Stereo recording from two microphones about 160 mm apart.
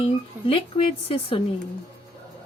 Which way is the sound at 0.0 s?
35° left (ahead or behind).